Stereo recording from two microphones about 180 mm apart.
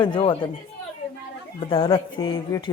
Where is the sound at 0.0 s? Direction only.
30° left (ahead or behind).